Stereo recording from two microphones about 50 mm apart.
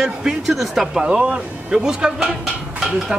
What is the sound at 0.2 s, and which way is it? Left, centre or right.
Speech, centre.